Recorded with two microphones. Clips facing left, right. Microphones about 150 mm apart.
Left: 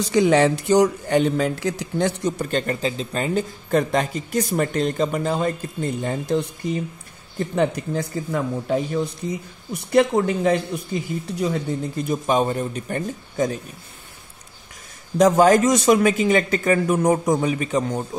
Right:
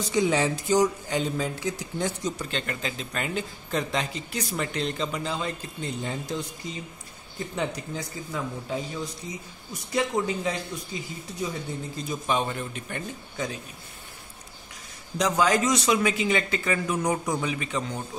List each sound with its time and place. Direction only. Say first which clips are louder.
0.0 s speech: left 7 dB; 75° left (ahead or behind)
2.5 s a man's voice: left 9 dB; 35° left (ahead or behind)
3.7 s speech: left 8 dB; 50° left (ahead or behind)
12.3 s a man's voice: left 6 dB; 40° left (ahead or behind)
15.1 s speech: left 9 dB; 50° left (ahead or behind)